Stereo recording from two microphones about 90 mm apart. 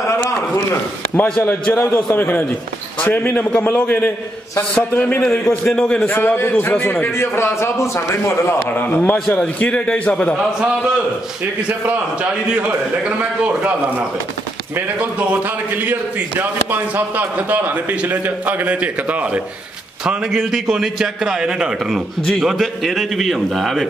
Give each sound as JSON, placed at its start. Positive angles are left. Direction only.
{"t": 0.0, "sound": "a sound", "side_deg": 35}
{"t": 1.1, "sound": "a man's voice", "side_deg": 20}
{"t": 6.1, "sound": "a man's voice", "side_deg": 25}
{"t": 12.2, "sound": "a man's voice", "side_deg": -15}
{"t": 15.7, "sound": "a man's voice", "side_deg": -20}